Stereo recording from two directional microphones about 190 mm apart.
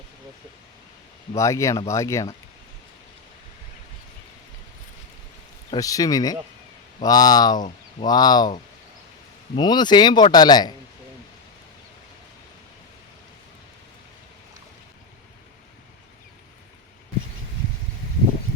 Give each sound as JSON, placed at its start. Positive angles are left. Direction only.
{"t": 1.4, "sound": "speech", "side_deg": 15}
{"t": 5.7, "sound": "speech", "side_deg": 20}
{"t": 9.6, "sound": "speech", "side_deg": 20}